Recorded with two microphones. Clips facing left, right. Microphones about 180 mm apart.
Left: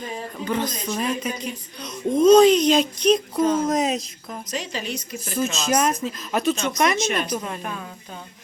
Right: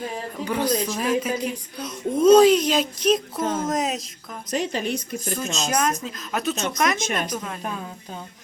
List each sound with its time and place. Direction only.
0.3 s speech: 10° right (ahead or behind)
4.5 s speech: 55° right (ahead or behind)
5.3 s speech: centre (ahead or behind)
7.0 s speech: 45° right (ahead or behind)
7.3 s speech: centre (ahead or behind)